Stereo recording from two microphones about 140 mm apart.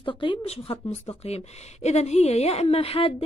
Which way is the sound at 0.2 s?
40° left (ahead or behind).